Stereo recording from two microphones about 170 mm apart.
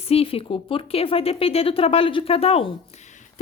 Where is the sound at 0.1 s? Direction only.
35° left (ahead or behind).